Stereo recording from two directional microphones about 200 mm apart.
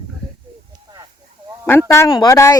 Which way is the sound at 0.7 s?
20° right (ahead or behind).